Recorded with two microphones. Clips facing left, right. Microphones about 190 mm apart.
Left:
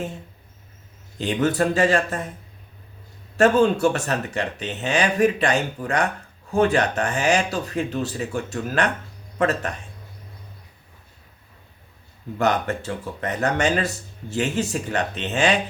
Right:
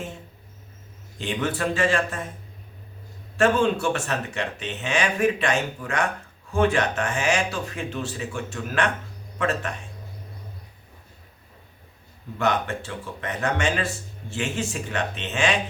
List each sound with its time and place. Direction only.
1.2 s speech: 40° left (ahead or behind)
3.3 s speech: 40° left (ahead or behind)
12.4 s speech: 40° left (ahead or behind)